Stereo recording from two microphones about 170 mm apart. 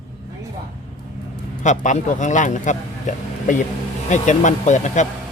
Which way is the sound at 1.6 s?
45° left (ahead or behind).